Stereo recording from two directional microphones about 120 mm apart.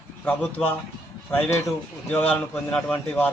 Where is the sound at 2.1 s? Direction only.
10° left (ahead or behind).